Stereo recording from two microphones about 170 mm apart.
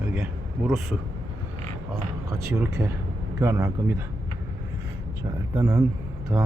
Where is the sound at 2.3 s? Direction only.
20° right (ahead or behind).